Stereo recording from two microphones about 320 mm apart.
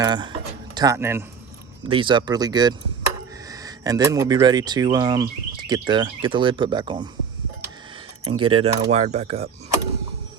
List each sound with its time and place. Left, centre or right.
0.0 s speech: centre
8.2 s speech: centre